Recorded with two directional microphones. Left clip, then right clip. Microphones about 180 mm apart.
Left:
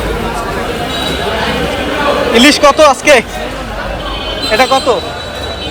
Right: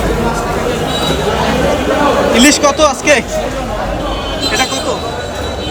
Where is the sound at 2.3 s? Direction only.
Centre (ahead or behind).